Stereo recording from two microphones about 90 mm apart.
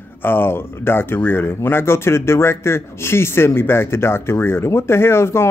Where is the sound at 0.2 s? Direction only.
25° left (ahead or behind).